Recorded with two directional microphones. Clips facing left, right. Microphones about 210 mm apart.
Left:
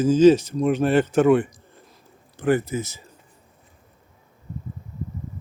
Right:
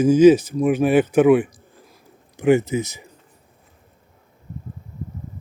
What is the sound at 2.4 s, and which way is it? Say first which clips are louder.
Speech: right 5 dB; 20° right (ahead or behind).